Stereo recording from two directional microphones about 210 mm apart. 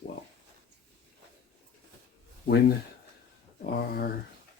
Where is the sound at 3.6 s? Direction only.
45° left (ahead or behind).